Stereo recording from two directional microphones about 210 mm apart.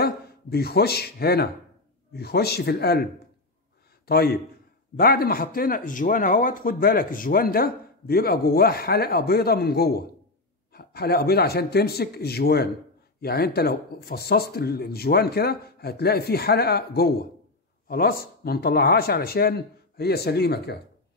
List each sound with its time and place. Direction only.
0.0 s speech: 50° left (ahead or behind)
4.1 s speech: 45° left (ahead or behind)